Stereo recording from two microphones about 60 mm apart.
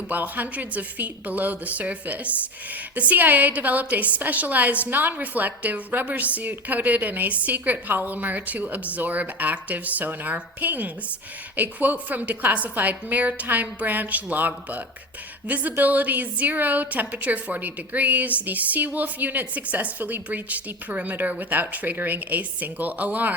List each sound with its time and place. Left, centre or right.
0.1 s a woman's voice: right